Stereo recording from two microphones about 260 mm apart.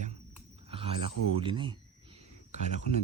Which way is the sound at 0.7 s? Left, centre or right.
Right.